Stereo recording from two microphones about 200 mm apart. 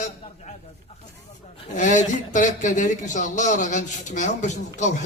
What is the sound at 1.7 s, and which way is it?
Speech, 40° left (ahead or behind).